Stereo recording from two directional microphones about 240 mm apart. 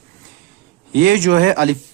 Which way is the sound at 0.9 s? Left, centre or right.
Right.